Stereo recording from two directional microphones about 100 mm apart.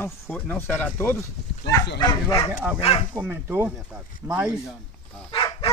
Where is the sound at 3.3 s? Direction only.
25° right (ahead or behind).